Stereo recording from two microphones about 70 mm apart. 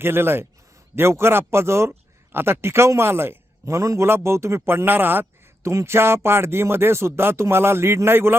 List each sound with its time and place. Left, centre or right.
0.0 s speech: right
5.6 s speech: right